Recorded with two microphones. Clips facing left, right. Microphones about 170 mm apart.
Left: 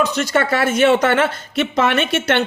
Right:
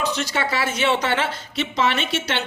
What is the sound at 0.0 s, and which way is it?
A woman's voice, 50° left (ahead or behind).